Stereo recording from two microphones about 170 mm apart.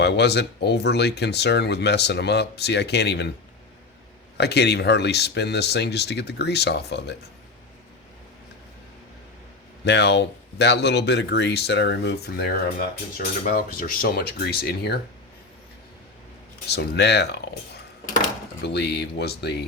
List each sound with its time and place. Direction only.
0.0 s speech: 85° left
4.4 s speech: 85° left
9.8 s speech: 85° left
16.6 s speech: 80° left
18.6 s speech: 75° left (ahead or behind)